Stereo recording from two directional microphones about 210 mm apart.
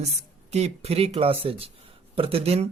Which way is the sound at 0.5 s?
30° right (ahead or behind).